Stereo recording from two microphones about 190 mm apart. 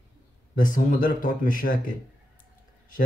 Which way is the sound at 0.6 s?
45° left (ahead or behind).